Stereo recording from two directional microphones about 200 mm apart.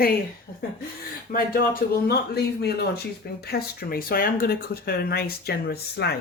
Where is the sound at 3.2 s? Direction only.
50° left (ahead or behind).